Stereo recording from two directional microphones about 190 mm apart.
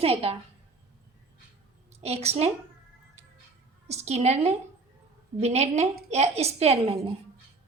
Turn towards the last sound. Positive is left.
turn(degrees=-30)  # may be behind; listen again after turning